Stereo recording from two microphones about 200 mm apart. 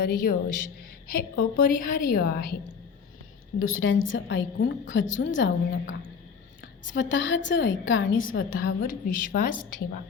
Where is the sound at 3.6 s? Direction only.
85° left.